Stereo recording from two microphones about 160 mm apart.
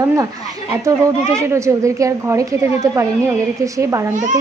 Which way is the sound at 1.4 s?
20° right (ahead or behind).